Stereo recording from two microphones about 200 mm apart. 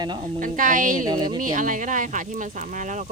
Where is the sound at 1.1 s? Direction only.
20° right (ahead or behind).